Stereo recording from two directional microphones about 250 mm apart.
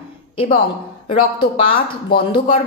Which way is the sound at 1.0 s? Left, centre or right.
Left.